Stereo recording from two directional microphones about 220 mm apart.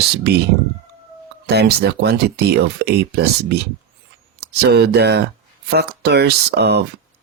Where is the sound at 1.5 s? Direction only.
50° right (ahead or behind).